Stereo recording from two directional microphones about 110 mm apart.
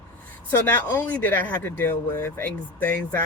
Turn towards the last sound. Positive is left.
turn(degrees=15)  # may be behind; listen again after turning